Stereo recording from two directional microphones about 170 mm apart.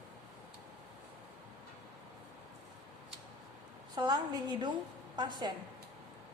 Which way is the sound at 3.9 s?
25° right (ahead or behind).